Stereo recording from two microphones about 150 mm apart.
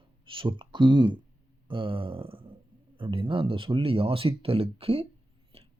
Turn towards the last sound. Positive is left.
turn(degrees=-40)  # may be behind; listen again after turning